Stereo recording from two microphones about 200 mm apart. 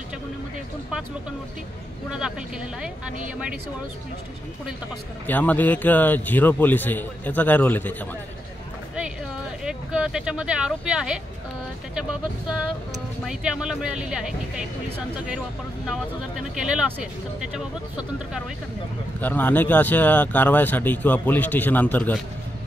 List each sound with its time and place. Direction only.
2.0 s speech: 5° right (ahead or behind)
5.2 s speech: 10° left (ahead or behind)
9.7 s speech: 5° right (ahead or behind)
15.9 s speech: 5° right (ahead or behind)
19.2 s speech: 10° left (ahead or behind)